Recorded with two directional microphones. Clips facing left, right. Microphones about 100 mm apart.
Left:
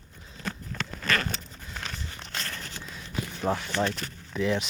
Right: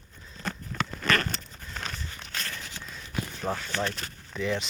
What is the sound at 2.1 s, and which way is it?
Walk, 25° left (ahead or behind).